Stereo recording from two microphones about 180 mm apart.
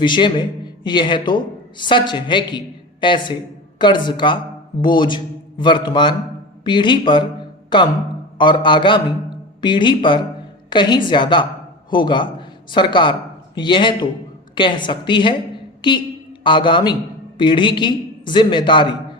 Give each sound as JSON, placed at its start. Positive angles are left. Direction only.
{"t": 0.0, "sound": "a man's voice", "side_deg": 25}
{"t": 8.4, "sound": "a man's voice", "side_deg": 25}